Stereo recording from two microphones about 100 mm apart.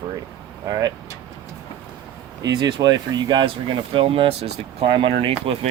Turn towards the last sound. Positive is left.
turn(degrees=-60)  # may be behind; listen again after turning